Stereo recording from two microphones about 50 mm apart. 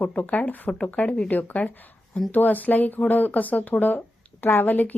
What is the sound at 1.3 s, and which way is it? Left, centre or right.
Speech, left.